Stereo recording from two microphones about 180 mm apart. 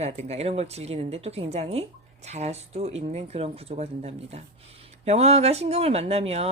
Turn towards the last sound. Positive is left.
turn(degrees=-35)  # may be behind; listen again after turning